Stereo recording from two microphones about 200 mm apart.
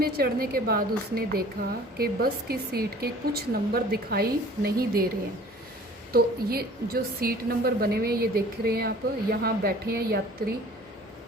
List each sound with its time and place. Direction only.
0.0 s speech: 50° right (ahead or behind)
6.1 s speech: 50° right (ahead or behind)